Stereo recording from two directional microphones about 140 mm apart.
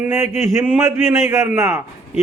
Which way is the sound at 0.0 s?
15° right (ahead or behind).